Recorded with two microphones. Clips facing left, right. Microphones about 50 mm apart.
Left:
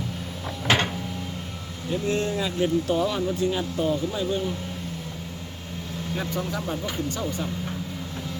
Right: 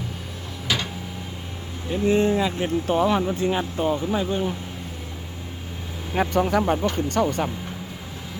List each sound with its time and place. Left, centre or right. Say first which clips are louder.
0.7 s a sound: left 4 dB; left
1.9 s speech: right 6 dB; right
6.1 s speech: right 10 dB; right